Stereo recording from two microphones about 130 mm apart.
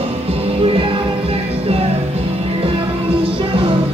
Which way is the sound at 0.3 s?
45° right (ahead or behind).